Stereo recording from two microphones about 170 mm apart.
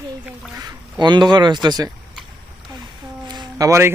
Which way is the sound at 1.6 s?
25° right (ahead or behind).